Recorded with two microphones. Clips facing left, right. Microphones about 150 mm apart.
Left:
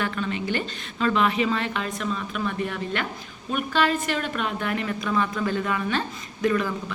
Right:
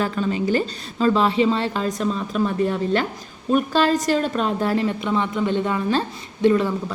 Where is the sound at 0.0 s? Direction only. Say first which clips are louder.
Right 5 dB; 35° right (ahead or behind).